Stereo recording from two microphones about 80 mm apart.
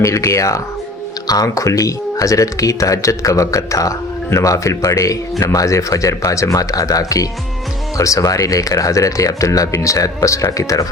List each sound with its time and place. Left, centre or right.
0.0 s speech: left